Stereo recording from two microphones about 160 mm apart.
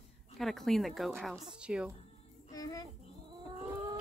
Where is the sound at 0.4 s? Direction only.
Centre (ahead or behind).